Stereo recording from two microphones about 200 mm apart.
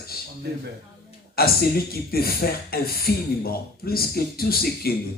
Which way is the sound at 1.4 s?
50° left (ahead or behind).